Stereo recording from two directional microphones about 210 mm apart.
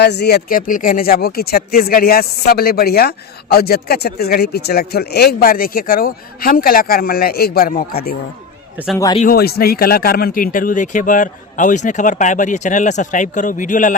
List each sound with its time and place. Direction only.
0.0 s speech: 55° left (ahead or behind)
9.3 s speech: 45° left (ahead or behind)